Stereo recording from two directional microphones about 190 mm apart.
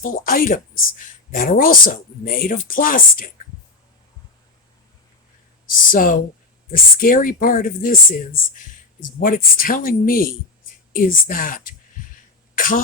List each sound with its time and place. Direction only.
0.0 s speech: 45° left (ahead or behind)
5.9 s speech: 45° left (ahead or behind)
12.5 s cough: 45° left (ahead or behind)